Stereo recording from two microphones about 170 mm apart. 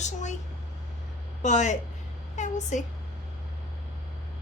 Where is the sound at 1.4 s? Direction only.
45° left (ahead or behind).